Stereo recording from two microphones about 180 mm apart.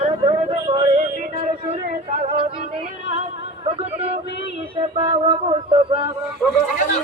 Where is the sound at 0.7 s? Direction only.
40° right (ahead or behind).